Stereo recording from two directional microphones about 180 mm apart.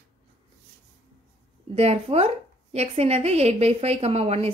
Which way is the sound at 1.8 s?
35° right (ahead or behind).